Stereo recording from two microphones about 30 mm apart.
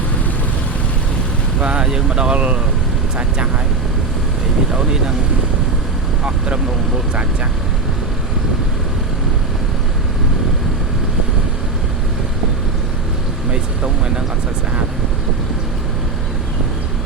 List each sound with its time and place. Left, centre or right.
1.6 s vehicle: right
1.9 s speech: right
4.7 s speech: right